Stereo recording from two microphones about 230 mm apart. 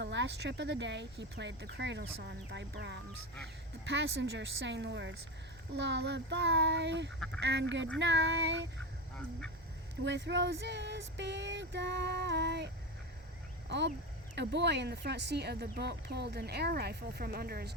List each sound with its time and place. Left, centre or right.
0.0 s speech: right
10.0 s speech: right